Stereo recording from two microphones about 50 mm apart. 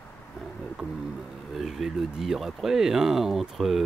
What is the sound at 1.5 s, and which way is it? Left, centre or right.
Speech, centre.